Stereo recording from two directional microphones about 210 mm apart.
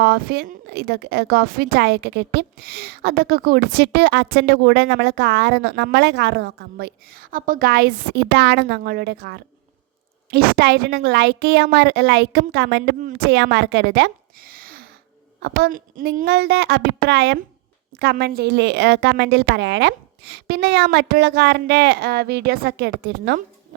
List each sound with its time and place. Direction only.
0.0 s a woman's voice: 50° right (ahead or behind)
13.0 s a woman's voice: 45° right (ahead or behind)